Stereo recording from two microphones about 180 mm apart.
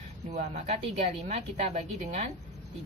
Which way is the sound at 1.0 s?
40° right (ahead or behind).